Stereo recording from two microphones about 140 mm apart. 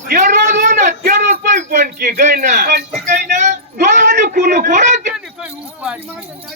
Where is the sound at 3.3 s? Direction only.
60° right (ahead or behind).